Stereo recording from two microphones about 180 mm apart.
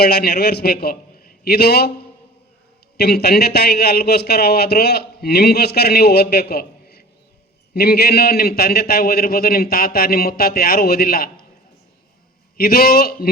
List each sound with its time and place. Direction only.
0.0 s a man's voice: 60° left (ahead or behind)
3.0 s a man's voice: 65° left (ahead or behind)
12.5 s a man's voice: 60° left (ahead or behind)